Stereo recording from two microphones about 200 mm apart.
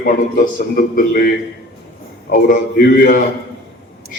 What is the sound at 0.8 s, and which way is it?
Speech, 45° left (ahead or behind).